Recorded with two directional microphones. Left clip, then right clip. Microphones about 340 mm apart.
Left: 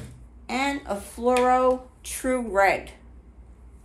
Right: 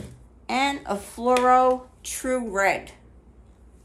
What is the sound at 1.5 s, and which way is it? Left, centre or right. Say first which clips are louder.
Speech: right 2 dB; centre.